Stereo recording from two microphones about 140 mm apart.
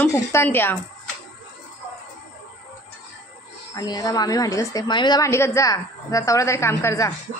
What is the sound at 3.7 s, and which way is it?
A woman's voice, 30° left (ahead or behind).